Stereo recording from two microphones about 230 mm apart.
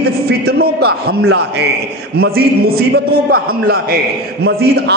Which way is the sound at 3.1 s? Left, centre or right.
Right.